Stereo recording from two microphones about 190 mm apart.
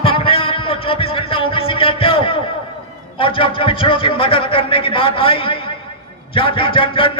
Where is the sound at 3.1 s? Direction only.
25° left (ahead or behind).